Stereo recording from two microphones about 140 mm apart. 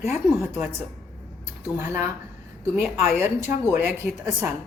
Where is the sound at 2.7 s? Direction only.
5° right (ahead or behind).